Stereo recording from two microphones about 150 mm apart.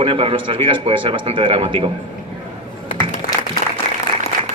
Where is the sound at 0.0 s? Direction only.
40° right (ahead or behind).